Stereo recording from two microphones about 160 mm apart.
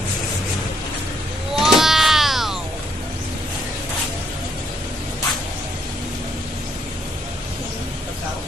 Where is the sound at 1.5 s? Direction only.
Centre (ahead or behind).